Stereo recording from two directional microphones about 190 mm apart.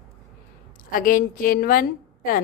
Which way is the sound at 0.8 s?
45° left (ahead or behind).